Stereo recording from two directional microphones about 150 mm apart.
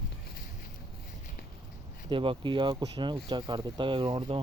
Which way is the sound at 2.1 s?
35° right (ahead or behind).